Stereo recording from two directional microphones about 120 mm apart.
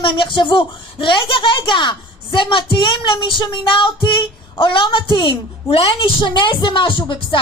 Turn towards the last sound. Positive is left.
turn(degrees=45)  # may be behind; listen again after turning